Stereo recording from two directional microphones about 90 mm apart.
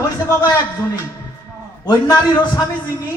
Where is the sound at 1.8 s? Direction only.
55° left (ahead or behind).